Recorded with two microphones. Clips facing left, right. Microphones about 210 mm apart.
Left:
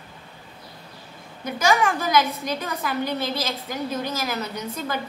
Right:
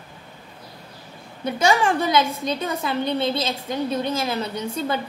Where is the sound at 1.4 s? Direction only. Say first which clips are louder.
Right 2 dB; 30° right (ahead or behind).